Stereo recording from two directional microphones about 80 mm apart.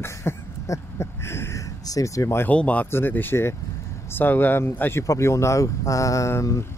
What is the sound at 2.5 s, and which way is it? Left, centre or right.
Speech, centre.